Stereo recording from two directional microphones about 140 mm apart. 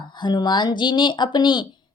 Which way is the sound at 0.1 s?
30° left (ahead or behind).